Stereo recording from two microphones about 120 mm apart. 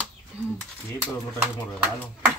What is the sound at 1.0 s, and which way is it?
Speech, 15° right (ahead or behind).